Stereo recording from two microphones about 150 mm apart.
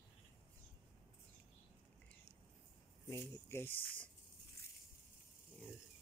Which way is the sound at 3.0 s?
20° left (ahead or behind).